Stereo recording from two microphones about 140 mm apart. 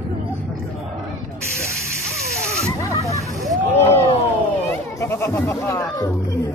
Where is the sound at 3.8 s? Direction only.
15° left (ahead or behind).